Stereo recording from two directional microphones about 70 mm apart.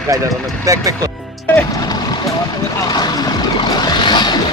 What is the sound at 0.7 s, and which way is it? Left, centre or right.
Speech, right.